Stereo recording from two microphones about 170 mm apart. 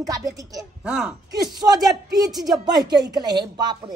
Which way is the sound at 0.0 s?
20° right (ahead or behind).